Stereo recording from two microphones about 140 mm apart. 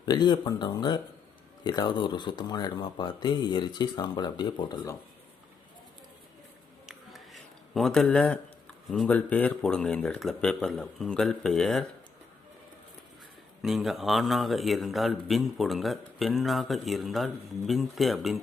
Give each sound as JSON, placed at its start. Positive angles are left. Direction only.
{"t": 0.0, "sound": "speech", "side_deg": 30}
{"t": 7.7, "sound": "speech", "side_deg": 5}
{"t": 13.6, "sound": "speech", "side_deg": 0}